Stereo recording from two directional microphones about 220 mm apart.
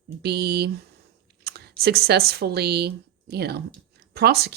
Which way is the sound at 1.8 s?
45° right (ahead or behind).